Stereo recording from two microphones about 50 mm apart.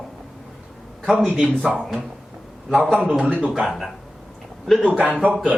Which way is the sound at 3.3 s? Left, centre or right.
Right.